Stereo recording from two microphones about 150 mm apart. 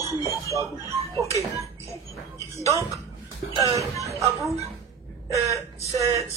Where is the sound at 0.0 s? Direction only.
20° right (ahead or behind).